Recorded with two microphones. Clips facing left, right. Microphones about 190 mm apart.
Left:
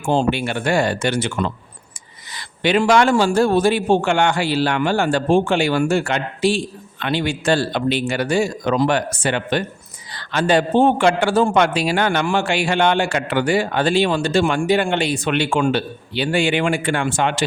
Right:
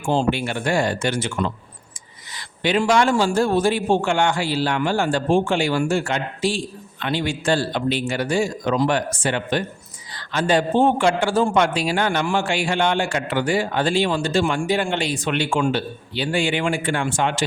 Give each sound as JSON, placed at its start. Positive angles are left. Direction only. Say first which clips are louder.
{"t": 0.1, "sound": "a man's voice", "louder": "left 2 dB", "side_deg": 60}